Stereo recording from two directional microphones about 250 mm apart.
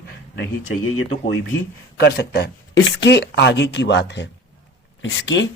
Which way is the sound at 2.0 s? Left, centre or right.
Left.